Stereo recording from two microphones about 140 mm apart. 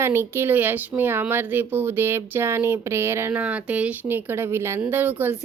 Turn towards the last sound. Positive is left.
turn(degrees=-15)  # may be behind; listen again after turning